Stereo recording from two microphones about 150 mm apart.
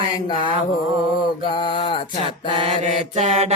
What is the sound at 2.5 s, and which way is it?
Mantra, 40° right (ahead or behind).